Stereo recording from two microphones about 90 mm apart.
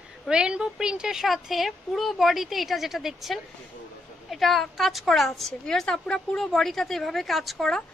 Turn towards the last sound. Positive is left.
turn(degrees=5)  # may be behind; listen again after turning